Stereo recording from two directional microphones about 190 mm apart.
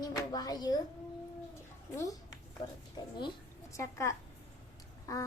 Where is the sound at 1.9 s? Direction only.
15° left (ahead or behind).